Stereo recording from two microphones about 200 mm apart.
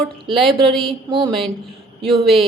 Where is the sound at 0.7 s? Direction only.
Centre (ahead or behind).